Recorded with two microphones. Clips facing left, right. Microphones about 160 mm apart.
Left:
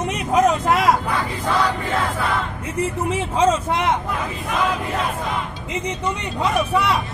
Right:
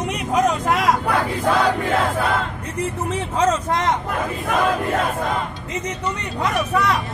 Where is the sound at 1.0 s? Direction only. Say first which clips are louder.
Right 3 dB; 60° right (ahead or behind).